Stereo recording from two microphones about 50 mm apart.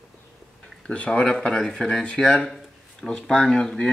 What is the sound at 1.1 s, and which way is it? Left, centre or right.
Speech, centre.